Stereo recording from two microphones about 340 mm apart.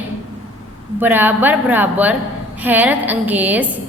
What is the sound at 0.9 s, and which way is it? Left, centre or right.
A woman's voice, centre.